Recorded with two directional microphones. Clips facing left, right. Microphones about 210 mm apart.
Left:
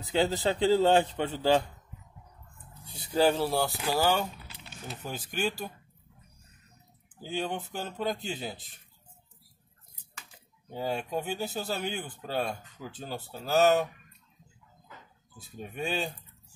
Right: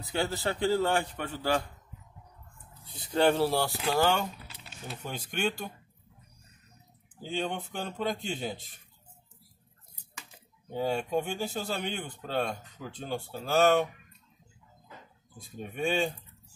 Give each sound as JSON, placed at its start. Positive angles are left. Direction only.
{"t": 0.0, "sound": "a man's voice", "side_deg": 20}
{"t": 3.1, "sound": "speech", "side_deg": 0}
{"t": 7.2, "sound": "speech", "side_deg": 5}
{"t": 10.7, "sound": "speech", "side_deg": 0}
{"t": 15.3, "sound": "speech", "side_deg": 5}